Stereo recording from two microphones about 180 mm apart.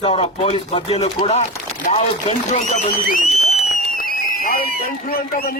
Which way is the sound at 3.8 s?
55° left (ahead or behind).